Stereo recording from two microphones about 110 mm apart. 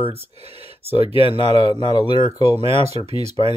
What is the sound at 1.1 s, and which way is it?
Speech, 50° left (ahead or behind).